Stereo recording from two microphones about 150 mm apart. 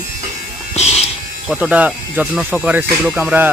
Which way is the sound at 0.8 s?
45° left (ahead or behind).